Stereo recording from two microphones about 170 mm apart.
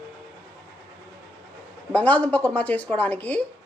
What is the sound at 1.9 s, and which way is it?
A woman's voice, 10° left (ahead or behind).